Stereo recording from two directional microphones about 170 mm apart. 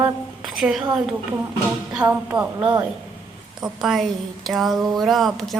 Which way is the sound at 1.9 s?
10° right (ahead or behind).